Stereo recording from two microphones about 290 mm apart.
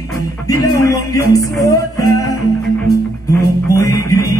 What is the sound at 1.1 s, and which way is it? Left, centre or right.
Music, centre.